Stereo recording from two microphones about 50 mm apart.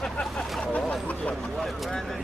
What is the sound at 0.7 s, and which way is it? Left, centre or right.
Speech, left.